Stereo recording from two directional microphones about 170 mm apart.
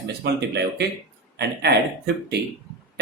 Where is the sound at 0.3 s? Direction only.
80° right.